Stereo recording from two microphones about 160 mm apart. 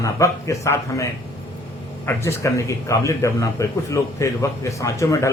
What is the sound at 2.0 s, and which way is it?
A man's voice, 20° left (ahead or behind).